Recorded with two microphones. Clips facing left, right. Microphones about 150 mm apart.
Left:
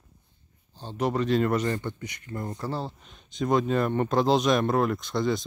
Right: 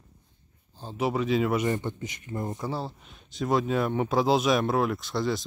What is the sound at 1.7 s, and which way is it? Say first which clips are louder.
Speech: right 1 dB; 20° right (ahead or behind).